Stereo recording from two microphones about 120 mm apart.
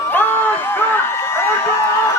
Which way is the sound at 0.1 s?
15° left (ahead or behind).